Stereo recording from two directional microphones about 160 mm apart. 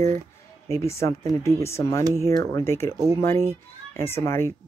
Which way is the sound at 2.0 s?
20° right (ahead or behind).